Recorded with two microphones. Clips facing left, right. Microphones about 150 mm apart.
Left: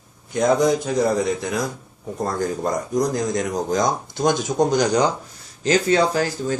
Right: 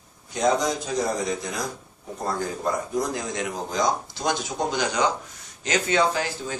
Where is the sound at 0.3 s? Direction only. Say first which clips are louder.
Left 5 dB; 55° left (ahead or behind).